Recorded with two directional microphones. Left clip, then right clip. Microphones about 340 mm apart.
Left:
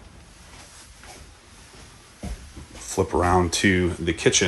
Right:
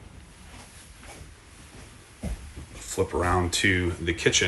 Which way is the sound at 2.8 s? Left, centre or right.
Centre.